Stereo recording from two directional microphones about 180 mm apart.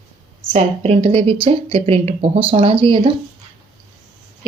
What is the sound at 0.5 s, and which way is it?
Speech, 35° right (ahead or behind).